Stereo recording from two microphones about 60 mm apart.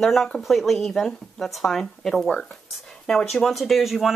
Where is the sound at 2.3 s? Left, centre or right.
Centre.